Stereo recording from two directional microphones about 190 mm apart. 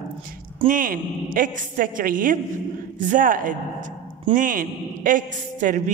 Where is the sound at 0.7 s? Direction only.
45° right (ahead or behind).